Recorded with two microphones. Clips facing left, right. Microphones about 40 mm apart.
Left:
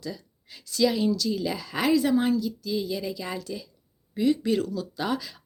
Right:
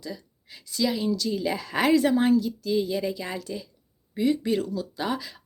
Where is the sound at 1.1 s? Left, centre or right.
Right.